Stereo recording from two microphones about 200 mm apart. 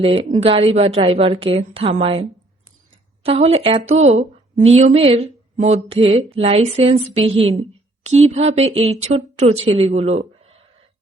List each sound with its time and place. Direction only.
0.0 s a woman's voice: 25° right (ahead or behind)
3.2 s speech: 30° right (ahead or behind)
8.3 s speech: 30° right (ahead or behind)